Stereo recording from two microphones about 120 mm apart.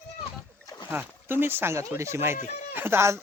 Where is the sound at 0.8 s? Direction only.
15° right (ahead or behind).